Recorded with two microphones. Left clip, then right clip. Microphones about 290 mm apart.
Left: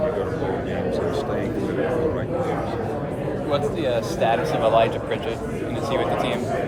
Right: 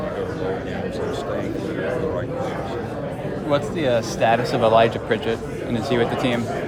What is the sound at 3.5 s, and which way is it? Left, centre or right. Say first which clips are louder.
Speech: right 3 dB; right.